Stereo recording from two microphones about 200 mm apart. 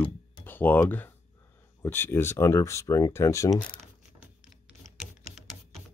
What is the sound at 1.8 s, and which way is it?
Speech, 10° left (ahead or behind).